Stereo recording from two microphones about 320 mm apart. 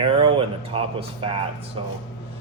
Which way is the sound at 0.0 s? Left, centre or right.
Centre.